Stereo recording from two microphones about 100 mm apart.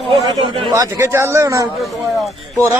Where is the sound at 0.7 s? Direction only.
30° right (ahead or behind).